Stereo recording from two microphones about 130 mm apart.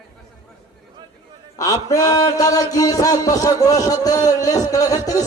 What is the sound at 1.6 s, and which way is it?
Speech, 25° left (ahead or behind).